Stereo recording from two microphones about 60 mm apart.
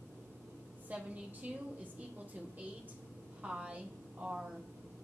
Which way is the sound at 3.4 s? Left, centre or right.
Centre.